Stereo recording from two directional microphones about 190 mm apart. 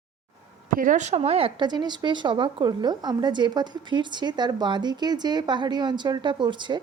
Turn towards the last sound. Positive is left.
turn(degrees=-25)  # may be behind; listen again after turning